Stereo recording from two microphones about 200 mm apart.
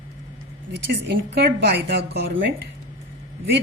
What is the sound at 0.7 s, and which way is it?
A woman's voice, 55° right (ahead or behind).